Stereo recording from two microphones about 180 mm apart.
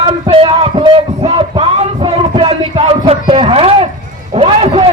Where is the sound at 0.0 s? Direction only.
30° right (ahead or behind).